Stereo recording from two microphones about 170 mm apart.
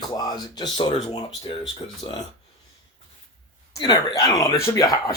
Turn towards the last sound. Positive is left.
turn(degrees=20)  # may be behind; listen again after turning